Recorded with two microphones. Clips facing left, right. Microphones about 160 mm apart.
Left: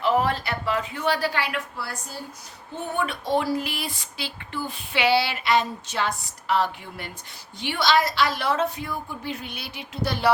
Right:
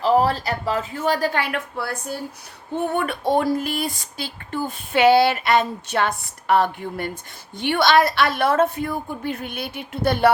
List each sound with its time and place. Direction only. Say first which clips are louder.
0.0 s a woman's voice: right 4 dB; 35° right (ahead or behind); by 10.3 s 55° right (ahead or behind)